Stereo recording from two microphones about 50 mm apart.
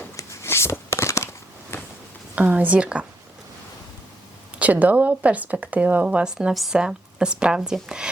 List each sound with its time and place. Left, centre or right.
0.2 s a sound: left
2.3 s speech: right
4.6 s speech: right
6.1 s speech: centre
6.5 s speech: centre
6.7 s a woman's voice: centre